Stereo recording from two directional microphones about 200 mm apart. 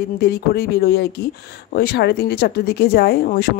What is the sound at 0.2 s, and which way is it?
Speech, 50° left (ahead or behind).